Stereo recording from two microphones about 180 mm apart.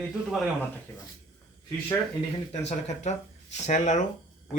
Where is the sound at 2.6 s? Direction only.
40° left (ahead or behind).